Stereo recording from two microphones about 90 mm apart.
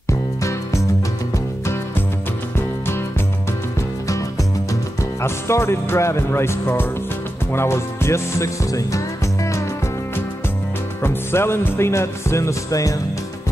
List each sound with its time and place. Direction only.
0.4 s music: 35° left (ahead or behind)
5.2 s music: 30° left (ahead or behind)
11.0 s music: 25° left (ahead or behind)